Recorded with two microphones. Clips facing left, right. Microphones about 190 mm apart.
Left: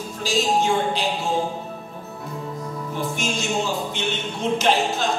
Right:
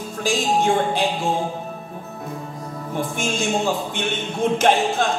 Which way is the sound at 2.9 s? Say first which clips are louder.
Right 3 dB; 55° right (ahead or behind).